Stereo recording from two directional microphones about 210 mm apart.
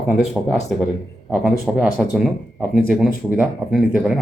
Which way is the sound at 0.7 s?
Centre (ahead or behind).